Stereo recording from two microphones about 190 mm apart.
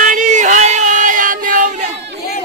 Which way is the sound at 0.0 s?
40° right (ahead or behind).